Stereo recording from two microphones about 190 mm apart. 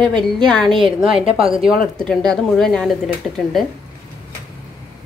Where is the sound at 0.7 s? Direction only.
25° right (ahead or behind).